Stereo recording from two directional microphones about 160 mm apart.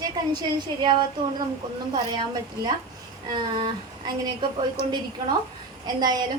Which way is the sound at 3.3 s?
25° right (ahead or behind).